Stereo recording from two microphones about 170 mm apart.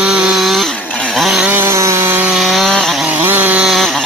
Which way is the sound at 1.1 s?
Centre (ahead or behind).